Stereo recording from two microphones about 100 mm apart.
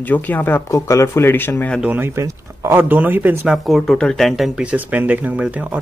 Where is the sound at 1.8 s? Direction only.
20° right (ahead or behind).